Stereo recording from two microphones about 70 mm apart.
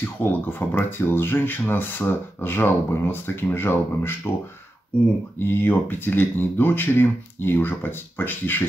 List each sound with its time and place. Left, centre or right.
0.0 s speech: left
5.4 s speech: left